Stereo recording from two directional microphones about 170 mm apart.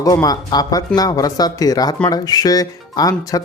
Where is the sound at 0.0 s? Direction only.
20° left (ahead or behind).